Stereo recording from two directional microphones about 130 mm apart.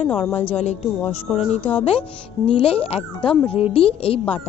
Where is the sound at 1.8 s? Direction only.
45° left (ahead or behind).